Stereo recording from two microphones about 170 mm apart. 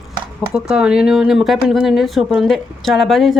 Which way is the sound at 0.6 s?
5° right (ahead or behind).